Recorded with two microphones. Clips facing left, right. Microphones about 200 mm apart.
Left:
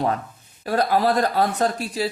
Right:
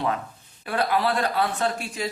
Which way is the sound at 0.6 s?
40° left (ahead or behind).